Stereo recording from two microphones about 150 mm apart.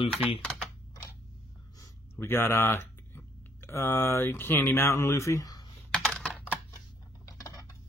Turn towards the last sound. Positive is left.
turn(degrees=20)  # may be behind; listen again after turning